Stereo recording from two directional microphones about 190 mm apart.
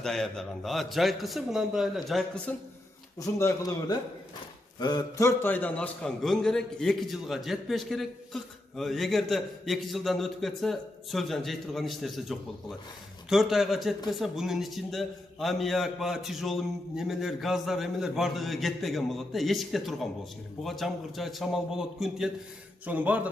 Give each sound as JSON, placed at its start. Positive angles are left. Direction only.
{"t": 0.0, "sound": "a man's voice", "side_deg": 5}
{"t": 3.2, "sound": "a man's voice", "side_deg": 15}